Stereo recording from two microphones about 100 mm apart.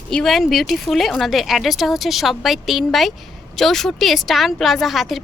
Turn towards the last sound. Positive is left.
turn(degrees=0)  # may be behind; listen again after turning